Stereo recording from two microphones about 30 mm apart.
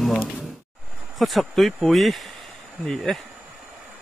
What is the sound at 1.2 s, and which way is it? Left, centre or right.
Speech, centre.